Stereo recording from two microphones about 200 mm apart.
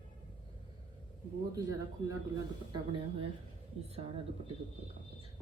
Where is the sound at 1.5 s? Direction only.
15° right (ahead or behind).